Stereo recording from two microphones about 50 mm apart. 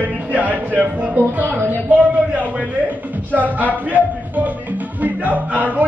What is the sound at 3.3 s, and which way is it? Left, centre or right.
Music, right.